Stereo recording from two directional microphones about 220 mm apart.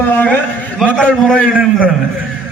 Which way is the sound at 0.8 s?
5° left (ahead or behind).